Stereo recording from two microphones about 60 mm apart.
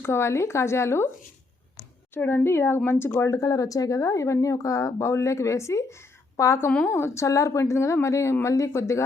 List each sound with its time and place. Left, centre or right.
0.0 s speech: left
2.1 s speech: left
3.2 s speech: left
6.8 s speech: left